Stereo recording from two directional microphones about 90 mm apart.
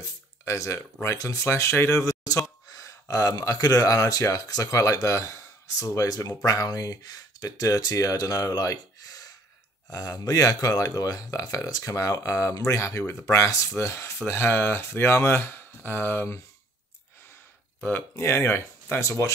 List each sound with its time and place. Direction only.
0.0 s a sound: 35° left (ahead or behind)
1.0 s a man's voice: 35° left (ahead or behind)
18.1 s speech: 30° left (ahead or behind)